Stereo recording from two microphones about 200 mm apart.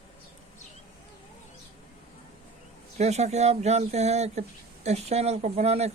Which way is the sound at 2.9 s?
35° right (ahead or behind).